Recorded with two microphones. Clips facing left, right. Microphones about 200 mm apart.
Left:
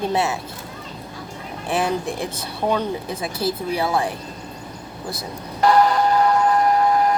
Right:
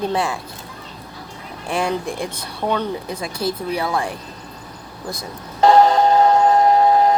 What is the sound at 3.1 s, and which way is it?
Speech, 25° left (ahead or behind).